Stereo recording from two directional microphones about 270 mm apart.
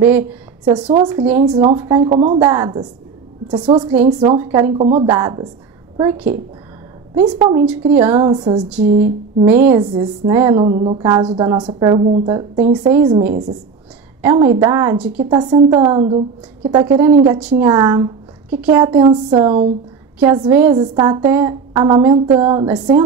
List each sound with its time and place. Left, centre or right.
0.7 s a woman's voice: centre
4.7 s a woman's voice: right
5.0 s speech: centre
7.6 s speech: centre
8.1 s speech: centre
13.3 s a woman's voice: right
14.2 s speech: centre
17.6 s speech: centre